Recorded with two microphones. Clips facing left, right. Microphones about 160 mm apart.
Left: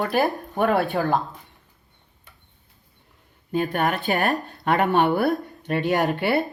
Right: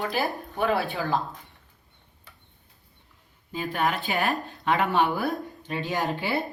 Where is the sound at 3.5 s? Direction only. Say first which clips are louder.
Left 4 dB; 60° left (ahead or behind); by 4.3 s 45° left (ahead or behind).